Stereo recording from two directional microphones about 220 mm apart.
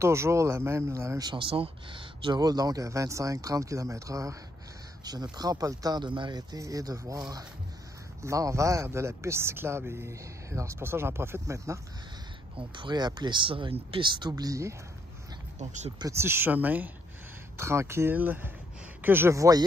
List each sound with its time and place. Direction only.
0.0 s speech: 10° right (ahead or behind)
15.6 s speech: 30° right (ahead or behind)
16.0 s speech: 10° right (ahead or behind)